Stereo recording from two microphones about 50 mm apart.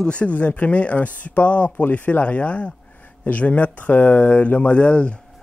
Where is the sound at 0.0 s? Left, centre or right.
Left.